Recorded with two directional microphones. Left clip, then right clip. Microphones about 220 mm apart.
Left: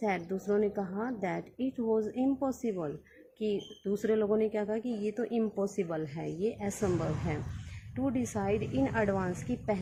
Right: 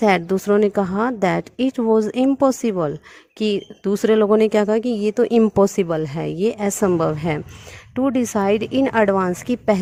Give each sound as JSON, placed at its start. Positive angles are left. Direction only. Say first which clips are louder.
{"t": 0.0, "sound": "speech", "louder": "right 16 dB", "side_deg": -45}